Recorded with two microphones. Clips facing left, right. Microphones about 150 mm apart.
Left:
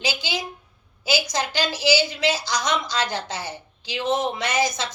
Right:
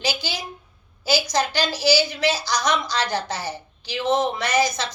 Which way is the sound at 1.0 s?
20° left (ahead or behind).